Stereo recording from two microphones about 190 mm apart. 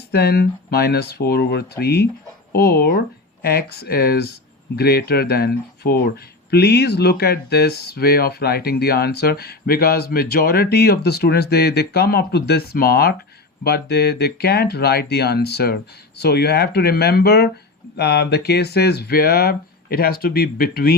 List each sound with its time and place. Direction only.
0.1 s speech: 55° left (ahead or behind)